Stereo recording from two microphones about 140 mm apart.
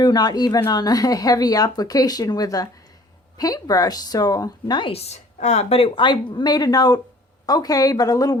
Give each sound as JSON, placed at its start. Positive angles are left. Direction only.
{"t": 0.0, "sound": "speech", "side_deg": 30}